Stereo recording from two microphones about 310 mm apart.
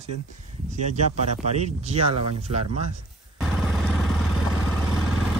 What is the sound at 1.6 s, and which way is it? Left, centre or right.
Speech, centre.